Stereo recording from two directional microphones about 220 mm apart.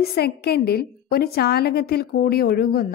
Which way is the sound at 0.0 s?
45° left (ahead or behind).